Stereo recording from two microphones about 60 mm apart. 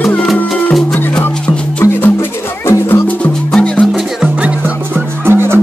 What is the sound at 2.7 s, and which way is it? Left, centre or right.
Music, left.